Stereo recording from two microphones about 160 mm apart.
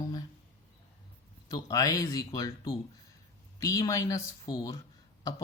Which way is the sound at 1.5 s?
20° left (ahead or behind).